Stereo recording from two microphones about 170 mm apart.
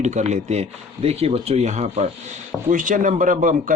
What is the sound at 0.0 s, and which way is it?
A man's voice, 45° right (ahead or behind).